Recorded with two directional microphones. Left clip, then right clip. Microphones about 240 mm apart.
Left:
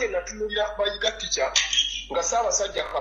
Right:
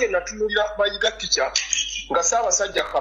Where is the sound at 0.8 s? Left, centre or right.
Right.